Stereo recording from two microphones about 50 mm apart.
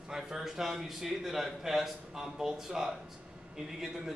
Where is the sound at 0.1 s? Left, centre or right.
Centre.